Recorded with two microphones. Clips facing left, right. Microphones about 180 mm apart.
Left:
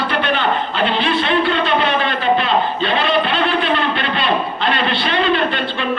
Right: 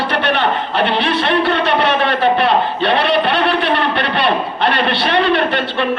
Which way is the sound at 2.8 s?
65° right (ahead or behind).